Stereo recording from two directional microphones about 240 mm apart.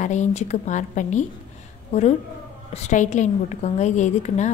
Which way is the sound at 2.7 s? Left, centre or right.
Left.